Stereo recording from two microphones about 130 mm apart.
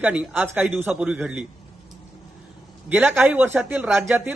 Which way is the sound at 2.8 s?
10° right (ahead or behind).